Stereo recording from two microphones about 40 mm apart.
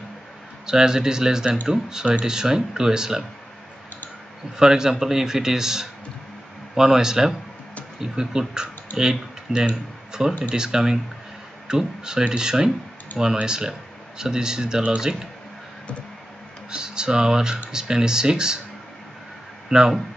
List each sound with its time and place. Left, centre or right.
0.7 s a man's voice: centre
4.6 s a man's voice: centre
16.7 s a man's voice: right